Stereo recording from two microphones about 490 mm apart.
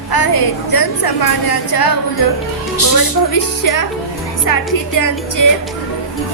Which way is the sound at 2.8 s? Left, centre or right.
Left.